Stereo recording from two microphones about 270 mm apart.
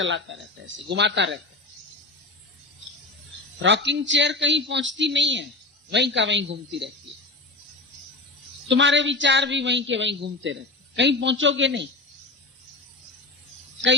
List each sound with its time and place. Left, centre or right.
0.0 s a woman's voice: right
3.6 s a woman's voice: right
8.7 s a woman's voice: right